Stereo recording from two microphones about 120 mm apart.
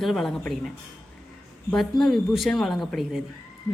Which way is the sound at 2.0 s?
Centre (ahead or behind).